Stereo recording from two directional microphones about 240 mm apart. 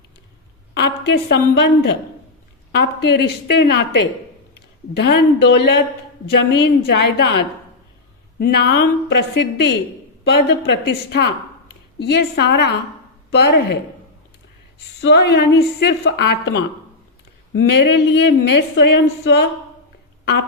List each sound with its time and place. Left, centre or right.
0.7 s speech: left
8.4 s speech: left
10.8 s speech: left
15.0 s speech: left
17.7 s speech: left